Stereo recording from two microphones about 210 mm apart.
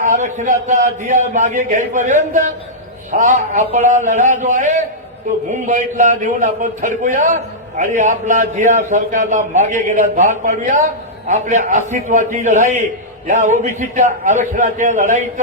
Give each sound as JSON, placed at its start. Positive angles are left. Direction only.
{"t": 0.0, "sound": "a man's voice", "side_deg": -35}